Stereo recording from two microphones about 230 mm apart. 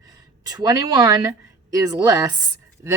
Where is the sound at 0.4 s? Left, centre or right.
Centre.